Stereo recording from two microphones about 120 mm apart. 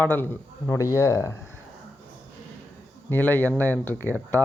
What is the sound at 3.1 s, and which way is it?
Speech, 15° left (ahead or behind).